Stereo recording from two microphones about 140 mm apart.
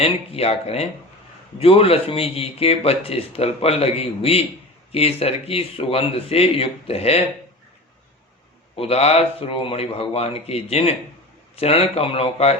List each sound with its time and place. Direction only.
0.0 s speech: 45° left (ahead or behind)
8.7 s speech: 45° left (ahead or behind)